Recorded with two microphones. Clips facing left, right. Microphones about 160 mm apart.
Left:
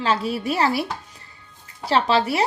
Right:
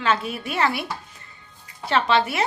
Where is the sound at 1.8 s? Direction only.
35° left (ahead or behind).